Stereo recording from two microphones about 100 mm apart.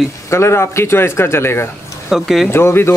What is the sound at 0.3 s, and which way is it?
Speech, 25° left (ahead or behind).